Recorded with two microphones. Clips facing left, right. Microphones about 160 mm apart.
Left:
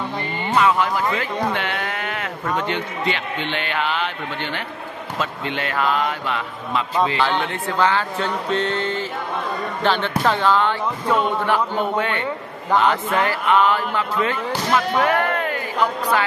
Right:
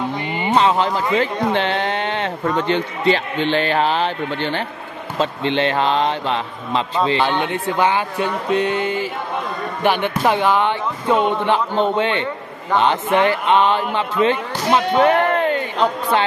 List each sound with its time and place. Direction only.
0.6 s speech: 30° right (ahead or behind)